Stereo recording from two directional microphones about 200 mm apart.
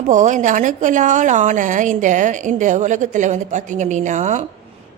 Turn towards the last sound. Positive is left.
turn(degrees=-35)  # may be behind; listen again after turning